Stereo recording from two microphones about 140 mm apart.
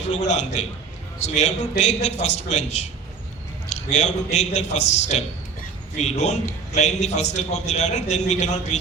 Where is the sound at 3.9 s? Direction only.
55° left (ahead or behind).